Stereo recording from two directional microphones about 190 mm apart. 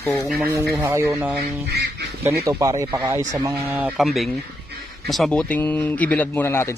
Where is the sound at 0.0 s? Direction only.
15° left (ahead or behind).